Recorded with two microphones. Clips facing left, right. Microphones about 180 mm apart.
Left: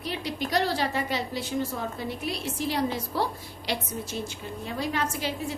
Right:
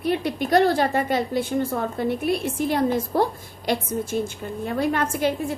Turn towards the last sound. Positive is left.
turn(degrees=-55)  # may be behind; listen again after turning